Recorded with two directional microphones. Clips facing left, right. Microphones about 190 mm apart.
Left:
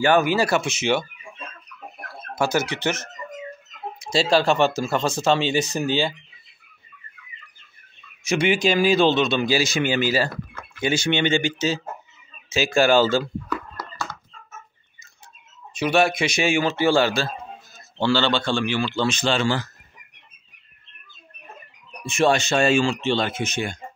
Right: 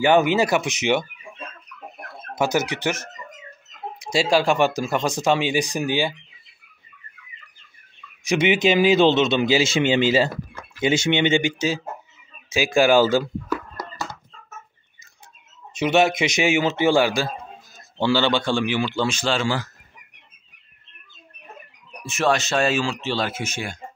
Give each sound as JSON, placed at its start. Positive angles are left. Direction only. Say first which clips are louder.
{"t": 0.0, "sound": "speech", "louder": "right 1 dB", "side_deg": -20}
{"t": 2.0, "sound": "speech", "louder": "right 1 dB", "side_deg": -20}
{"t": 8.2, "sound": "speech", "louder": "right 1 dB", "side_deg": -15}
{"t": 15.7, "sound": "speech", "louder": "right 1 dB", "side_deg": -20}
{"t": 22.0, "sound": "speech", "louder": "left 2 dB", "side_deg": 0}